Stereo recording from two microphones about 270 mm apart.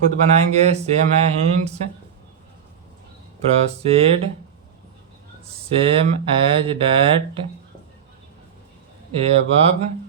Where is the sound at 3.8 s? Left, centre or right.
Right.